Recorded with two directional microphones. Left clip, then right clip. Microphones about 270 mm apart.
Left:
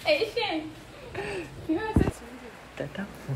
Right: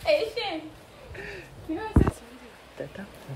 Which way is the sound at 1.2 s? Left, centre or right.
Centre.